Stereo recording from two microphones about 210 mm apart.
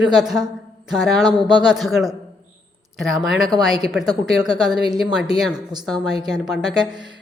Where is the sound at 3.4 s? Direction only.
20° right (ahead or behind).